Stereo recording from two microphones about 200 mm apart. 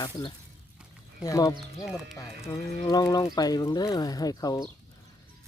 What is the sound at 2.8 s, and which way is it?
Speech, 20° left (ahead or behind).